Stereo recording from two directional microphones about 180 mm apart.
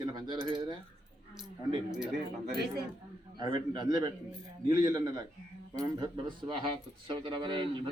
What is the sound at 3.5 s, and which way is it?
Speech, 25° right (ahead or behind).